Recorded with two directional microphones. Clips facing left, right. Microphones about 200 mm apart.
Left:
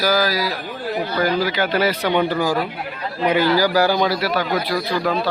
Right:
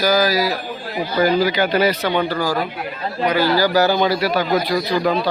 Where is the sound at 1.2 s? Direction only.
Centre (ahead or behind); by 2.3 s 15° left (ahead or behind).